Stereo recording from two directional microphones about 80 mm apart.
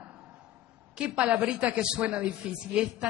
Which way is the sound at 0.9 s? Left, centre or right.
Centre.